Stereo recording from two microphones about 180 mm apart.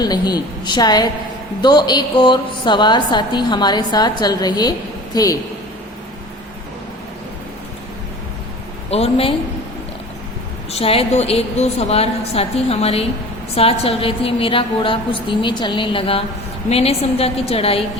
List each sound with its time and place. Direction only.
0.0 s a woman's voice: 20° left (ahead or behind)
8.9 s a woman's voice: 35° left (ahead or behind)
10.7 s a woman's voice: 35° left (ahead or behind)